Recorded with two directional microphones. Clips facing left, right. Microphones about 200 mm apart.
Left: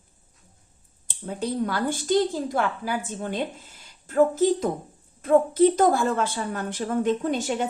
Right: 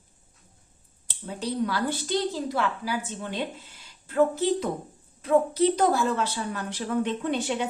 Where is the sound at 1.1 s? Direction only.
50° left (ahead or behind).